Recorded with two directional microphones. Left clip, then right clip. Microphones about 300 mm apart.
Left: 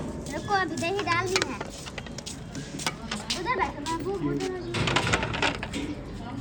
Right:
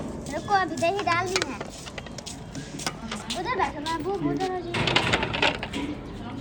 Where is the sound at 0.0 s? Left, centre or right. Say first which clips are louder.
Right 2 dB; centre.